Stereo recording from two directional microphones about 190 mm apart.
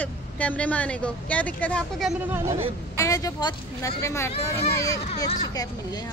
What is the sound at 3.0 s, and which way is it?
Speech, 20° left (ahead or behind).